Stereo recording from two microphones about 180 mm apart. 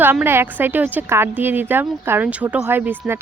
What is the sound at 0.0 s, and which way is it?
A woman's voice, 10° right (ahead or behind).